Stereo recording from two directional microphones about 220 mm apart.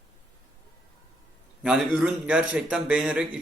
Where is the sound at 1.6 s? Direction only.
5° right (ahead or behind).